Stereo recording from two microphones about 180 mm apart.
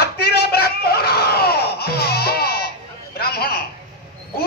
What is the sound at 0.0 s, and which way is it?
Screaming, 60° left (ahead or behind).